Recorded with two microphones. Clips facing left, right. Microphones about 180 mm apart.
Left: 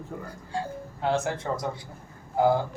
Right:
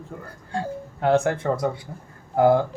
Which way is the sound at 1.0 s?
60° right (ahead or behind).